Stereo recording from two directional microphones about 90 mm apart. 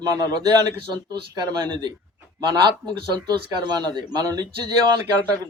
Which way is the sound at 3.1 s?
50° right (ahead or behind).